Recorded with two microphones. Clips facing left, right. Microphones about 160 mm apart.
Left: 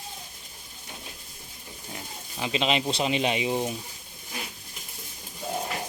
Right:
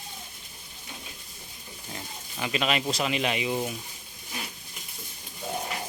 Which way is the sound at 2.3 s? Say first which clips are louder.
Left 1 dB; 20° left (ahead or behind).